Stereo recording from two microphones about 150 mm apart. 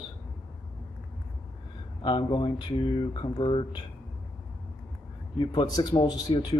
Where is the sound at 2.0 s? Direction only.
30° left (ahead or behind).